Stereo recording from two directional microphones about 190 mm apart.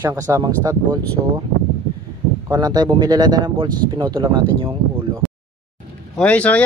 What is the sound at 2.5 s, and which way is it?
Speech, 20° right (ahead or behind).